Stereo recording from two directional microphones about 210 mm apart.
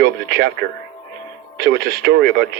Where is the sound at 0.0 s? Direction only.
50° right (ahead or behind).